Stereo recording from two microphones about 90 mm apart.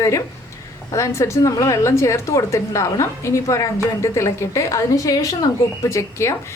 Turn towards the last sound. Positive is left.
turn(degrees=35)  # may be behind; listen again after turning